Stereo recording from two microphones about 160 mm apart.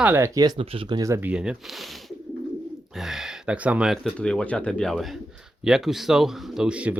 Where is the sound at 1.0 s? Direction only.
20° right (ahead or behind).